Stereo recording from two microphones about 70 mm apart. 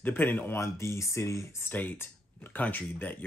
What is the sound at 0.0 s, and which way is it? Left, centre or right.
Speech, left.